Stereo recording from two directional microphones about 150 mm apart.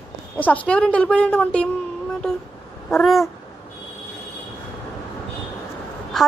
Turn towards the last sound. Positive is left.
turn(degrees=0)  # may be behind; listen again after turning